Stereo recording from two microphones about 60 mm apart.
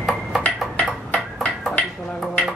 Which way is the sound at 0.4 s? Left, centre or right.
Left.